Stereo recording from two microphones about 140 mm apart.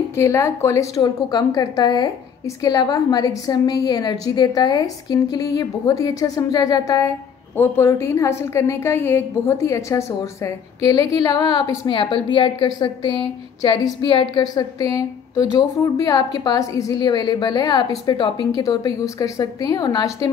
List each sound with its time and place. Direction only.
0.1 s a woman's voice: 20° left (ahead or behind)
7.5 s a woman's voice: 15° left (ahead or behind)
11.9 s a woman's voice: 35° left (ahead or behind)